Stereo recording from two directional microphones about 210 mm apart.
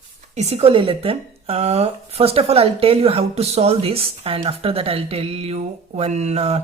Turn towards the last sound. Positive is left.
turn(degrees=-30)  # may be behind; listen again after turning